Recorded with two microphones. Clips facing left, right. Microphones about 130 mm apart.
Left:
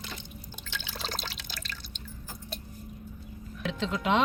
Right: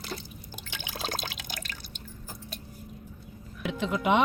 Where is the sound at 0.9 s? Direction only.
50° right (ahead or behind).